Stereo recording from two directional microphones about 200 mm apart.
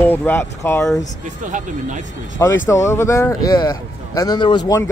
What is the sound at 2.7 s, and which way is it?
Speech, 15° left (ahead or behind).